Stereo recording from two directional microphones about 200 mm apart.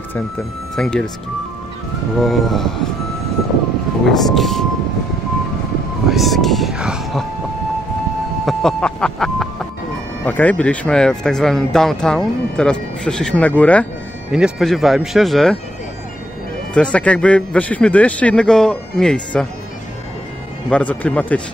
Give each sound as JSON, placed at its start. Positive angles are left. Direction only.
{"t": 0.7, "sound": "speech", "side_deg": 5}
{"t": 2.1, "sound": "speech", "side_deg": 0}
{"t": 4.2, "sound": "speech", "side_deg": 0}
{"t": 6.0, "sound": "speech", "side_deg": 0}
{"t": 8.5, "sound": "speech", "side_deg": 5}
{"t": 16.7, "sound": "speech", "side_deg": 5}
{"t": 20.7, "sound": "speech", "side_deg": 5}